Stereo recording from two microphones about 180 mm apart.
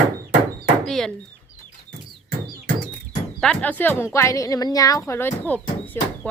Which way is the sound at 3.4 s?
5° left (ahead or behind).